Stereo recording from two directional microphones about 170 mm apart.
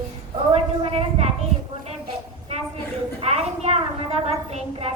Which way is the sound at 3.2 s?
40° right (ahead or behind).